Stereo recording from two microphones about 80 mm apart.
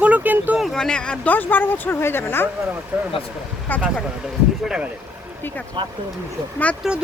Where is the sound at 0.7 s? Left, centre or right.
Centre; by 2.4 s left.